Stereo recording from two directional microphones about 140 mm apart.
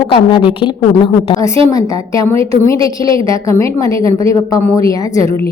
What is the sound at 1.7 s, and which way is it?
A woman's voice, 25° left (ahead or behind).